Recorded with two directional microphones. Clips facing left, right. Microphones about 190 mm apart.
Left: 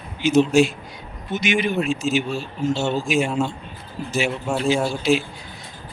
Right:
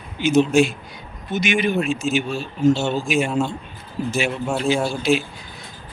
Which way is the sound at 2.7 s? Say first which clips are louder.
Right 2 dB; 15° right (ahead or behind).